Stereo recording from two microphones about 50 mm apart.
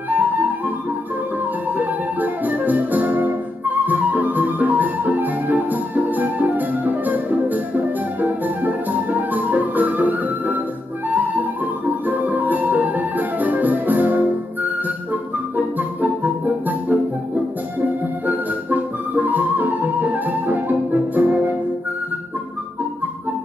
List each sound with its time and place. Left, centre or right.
0.1 s flute: right
1.7 s music: right
18.2 s music: right